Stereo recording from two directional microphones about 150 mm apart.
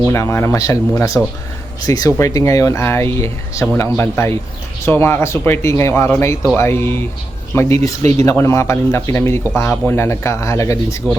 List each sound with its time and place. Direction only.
0.1 s speech: 15° left (ahead or behind)